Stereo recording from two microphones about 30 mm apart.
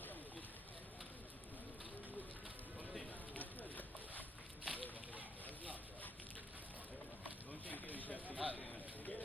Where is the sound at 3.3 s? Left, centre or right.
Left.